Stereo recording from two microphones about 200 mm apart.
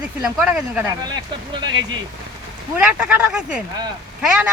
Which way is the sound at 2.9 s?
5° right (ahead or behind).